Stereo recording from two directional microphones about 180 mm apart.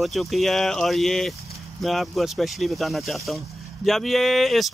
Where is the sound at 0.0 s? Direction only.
Centre (ahead or behind).